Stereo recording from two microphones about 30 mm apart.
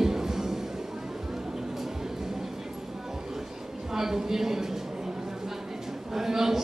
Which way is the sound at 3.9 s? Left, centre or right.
Centre.